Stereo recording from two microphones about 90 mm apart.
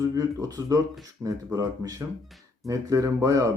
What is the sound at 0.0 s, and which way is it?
Speech, 40° right (ahead or behind).